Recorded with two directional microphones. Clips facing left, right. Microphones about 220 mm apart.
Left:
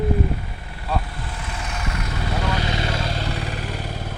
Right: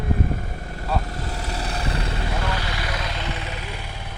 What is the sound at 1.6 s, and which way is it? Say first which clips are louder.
Vehicle: right 1 dB; 35° right (ahead or behind).